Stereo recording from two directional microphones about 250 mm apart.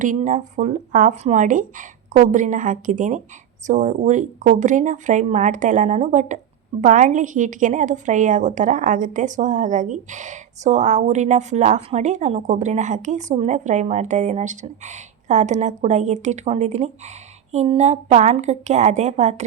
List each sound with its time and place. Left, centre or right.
0.0 s a woman's voice: right